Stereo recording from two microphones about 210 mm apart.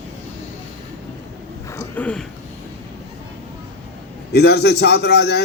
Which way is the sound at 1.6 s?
15° left (ahead or behind).